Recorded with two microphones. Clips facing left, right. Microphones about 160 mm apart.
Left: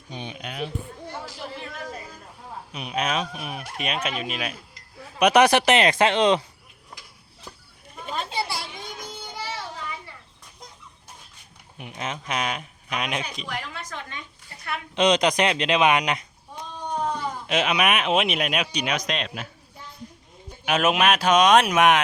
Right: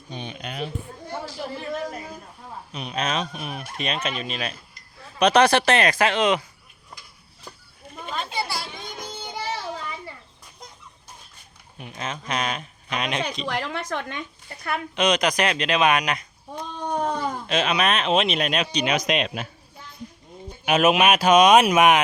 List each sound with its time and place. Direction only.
0.1 s speech: 15° left (ahead or behind)
2.7 s speech: 10° left (ahead or behind); by 6.4 s 30° left (ahead or behind)
8.1 s children playing: 35° left (ahead or behind)
11.8 s speech: 15° left (ahead or behind)
13.4 s speech: 75° right (ahead or behind)
14.9 s speech: 25° left (ahead or behind)
16.7 s cat: 55° right (ahead or behind)
17.4 s speech: 15° left (ahead or behind)
18.9 s speech: 10° right (ahead or behind)
20.7 s speech: 5° right (ahead or behind)